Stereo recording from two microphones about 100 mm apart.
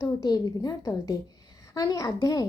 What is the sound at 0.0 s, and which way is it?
A woman's voice, 40° left (ahead or behind).